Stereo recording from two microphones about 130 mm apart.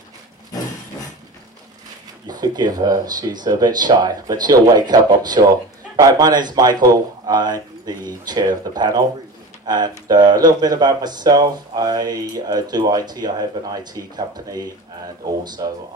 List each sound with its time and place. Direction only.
2.2 s speech: 30° right (ahead or behind)